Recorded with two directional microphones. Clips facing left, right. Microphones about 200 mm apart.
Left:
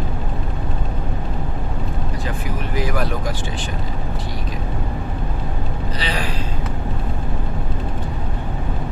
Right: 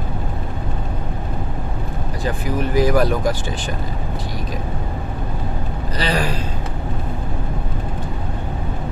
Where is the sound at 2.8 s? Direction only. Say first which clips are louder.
Right 7 dB; 40° right (ahead or behind).